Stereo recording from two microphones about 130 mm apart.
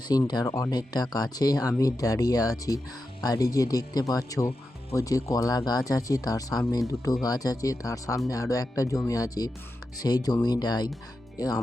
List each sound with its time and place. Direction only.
0.1 s speech: 30° left (ahead or behind)